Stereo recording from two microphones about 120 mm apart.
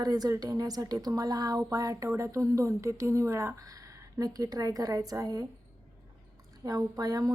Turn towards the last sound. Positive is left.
turn(degrees=-30)  # may be behind; listen again after turning